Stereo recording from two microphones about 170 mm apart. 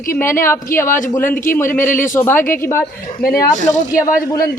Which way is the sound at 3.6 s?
45° left (ahead or behind).